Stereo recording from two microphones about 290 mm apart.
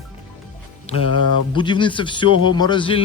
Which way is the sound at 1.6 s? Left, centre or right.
Centre.